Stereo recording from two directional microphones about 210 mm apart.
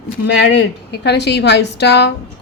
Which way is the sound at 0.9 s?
55° left (ahead or behind).